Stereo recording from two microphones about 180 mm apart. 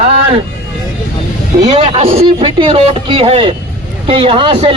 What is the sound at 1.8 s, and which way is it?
Speech, 35° right (ahead or behind).